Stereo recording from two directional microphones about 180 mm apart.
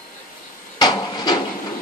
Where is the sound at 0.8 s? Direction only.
25° left (ahead or behind).